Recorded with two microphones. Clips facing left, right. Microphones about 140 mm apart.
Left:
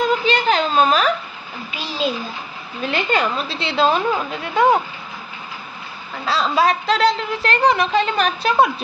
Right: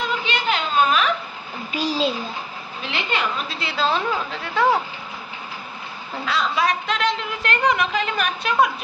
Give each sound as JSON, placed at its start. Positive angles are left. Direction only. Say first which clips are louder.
{"t": 0.0, "sound": "a sound", "louder": "left 7 dB", "side_deg": 40}
{"t": 1.7, "sound": "a child's voice", "louder": "right 4 dB", "side_deg": -40}
{"t": 2.8, "sound": "a woman's voice", "louder": "left 6 dB", "side_deg": 45}
{"t": 3.4, "sound": "a woman's voice", "louder": "left 5 dB", "side_deg": 25}
{"t": 6.2, "sound": "a woman's voice", "louder": "left 4 dB", "side_deg": 30}